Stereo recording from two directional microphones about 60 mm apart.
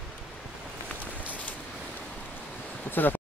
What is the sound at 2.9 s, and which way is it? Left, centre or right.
Speech, left.